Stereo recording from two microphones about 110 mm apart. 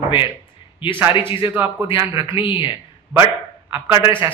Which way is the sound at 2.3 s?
45° left (ahead or behind).